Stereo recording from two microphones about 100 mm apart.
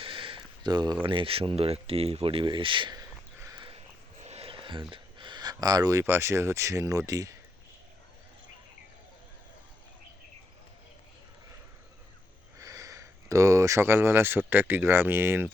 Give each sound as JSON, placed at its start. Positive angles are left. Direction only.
{"t": 0.0, "sound": "a sound", "side_deg": -60}
{"t": 1.0, "sound": "speech", "side_deg": -60}
{"t": 4.3, "sound": "speech", "side_deg": -80}
{"t": 12.5, "sound": "speech", "side_deg": -35}